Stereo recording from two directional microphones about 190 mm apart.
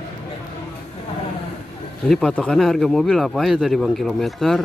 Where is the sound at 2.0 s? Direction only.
Centre (ahead or behind).